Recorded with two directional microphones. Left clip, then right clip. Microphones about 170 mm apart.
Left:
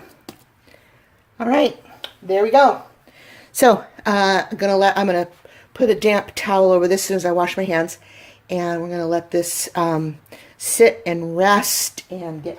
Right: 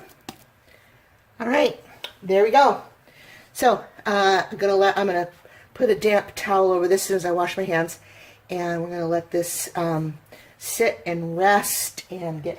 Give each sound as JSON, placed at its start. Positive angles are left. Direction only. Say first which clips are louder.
{"t": 1.4, "sound": "speech", "louder": "left 3 dB", "side_deg": 25}
{"t": 3.5, "sound": "speech", "louder": "left 6 dB", "side_deg": 65}
{"t": 5.7, "sound": "speech", "louder": "left 3 dB", "side_deg": 40}
{"t": 10.8, "sound": "speech", "louder": "left 8 dB", "side_deg": 60}
{"t": 11.9, "sound": "speech", "louder": "left 1 dB", "side_deg": 25}